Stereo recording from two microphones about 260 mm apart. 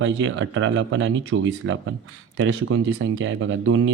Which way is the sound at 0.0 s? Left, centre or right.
Right.